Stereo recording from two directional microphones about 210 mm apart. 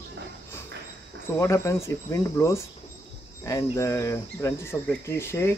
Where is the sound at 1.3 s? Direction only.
15° left (ahead or behind).